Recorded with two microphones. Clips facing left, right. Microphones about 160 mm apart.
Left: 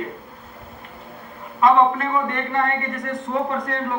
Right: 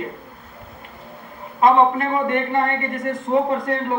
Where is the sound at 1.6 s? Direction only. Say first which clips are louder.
Right 1 dB; 25° right (ahead or behind).